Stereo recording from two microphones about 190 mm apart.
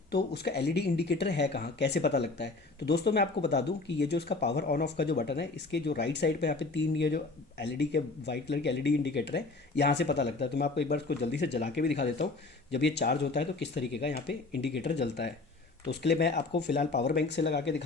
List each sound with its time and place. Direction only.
0.1 s speech: 60° left (ahead or behind)